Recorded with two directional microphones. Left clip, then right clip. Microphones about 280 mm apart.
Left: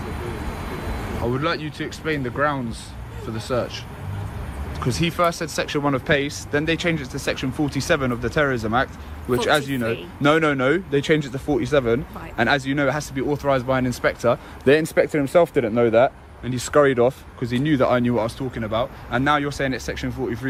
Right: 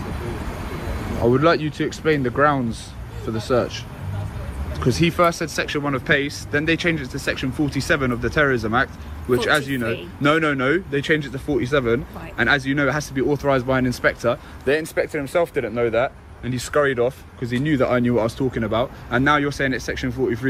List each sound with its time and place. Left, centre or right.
1.2 s speech: centre
4.8 s speech: centre
14.6 s speech: left; by 20.5 s centre